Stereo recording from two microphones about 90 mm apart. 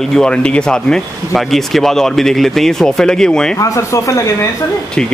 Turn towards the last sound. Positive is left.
turn(degrees=10)  # may be behind; listen again after turning